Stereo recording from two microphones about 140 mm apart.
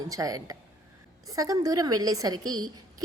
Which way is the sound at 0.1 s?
25° right (ahead or behind).